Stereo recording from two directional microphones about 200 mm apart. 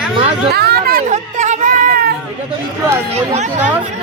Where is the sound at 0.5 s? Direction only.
50° right (ahead or behind).